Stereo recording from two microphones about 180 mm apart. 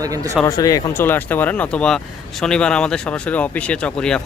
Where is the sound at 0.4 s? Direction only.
20° left (ahead or behind).